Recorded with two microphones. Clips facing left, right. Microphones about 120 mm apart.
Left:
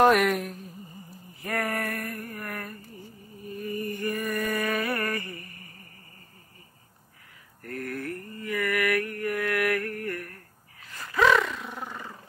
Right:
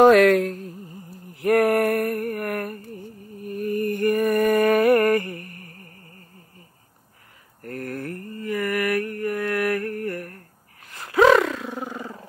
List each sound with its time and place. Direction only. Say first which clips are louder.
0.1 s speech: right 8 dB; 90° right
1.3 s a sound: right 12 dB; 70° right (ahead or behind)
3.4 s mantra: right 8 dB; 60° right (ahead or behind)
7.6 s mantra: right 3 dB; 40° right (ahead or behind)
9.4 s a sound: right 2 dB; 30° right (ahead or behind)
11.1 s roar: right 6 dB; 55° right (ahead or behind)
11.4 s roar: right 7 dB; 90° right
11.8 s vehicle: right 6 dB; 35° right (ahead or behind)